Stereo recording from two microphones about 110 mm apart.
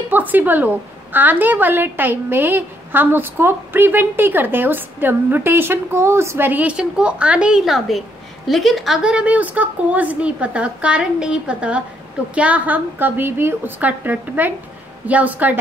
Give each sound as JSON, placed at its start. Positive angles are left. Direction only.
{"t": 0.1, "sound": "a woman's voice", "side_deg": -15}